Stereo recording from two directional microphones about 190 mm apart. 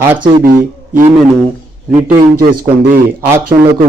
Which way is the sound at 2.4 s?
50° right (ahead or behind).